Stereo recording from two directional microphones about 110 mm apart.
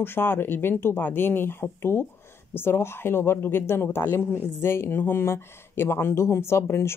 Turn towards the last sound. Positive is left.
turn(degrees=25)  # may be behind; listen again after turning